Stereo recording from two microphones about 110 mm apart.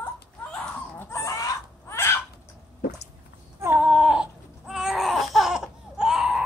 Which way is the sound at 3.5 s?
20° right (ahead or behind).